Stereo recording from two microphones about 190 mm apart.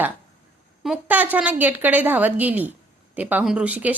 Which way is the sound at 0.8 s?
5° right (ahead or behind).